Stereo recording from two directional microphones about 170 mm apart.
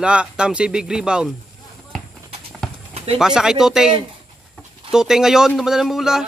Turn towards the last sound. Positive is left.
turn(degrees=0)  # may be behind; listen again after turning